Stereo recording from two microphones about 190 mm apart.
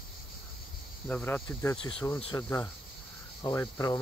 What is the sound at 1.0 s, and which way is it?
Speech, 10° left (ahead or behind).